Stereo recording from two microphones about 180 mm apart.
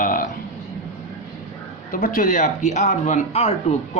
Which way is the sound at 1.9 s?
50° left (ahead or behind).